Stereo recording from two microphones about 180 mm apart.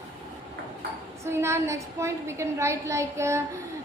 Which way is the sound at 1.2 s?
15° right (ahead or behind).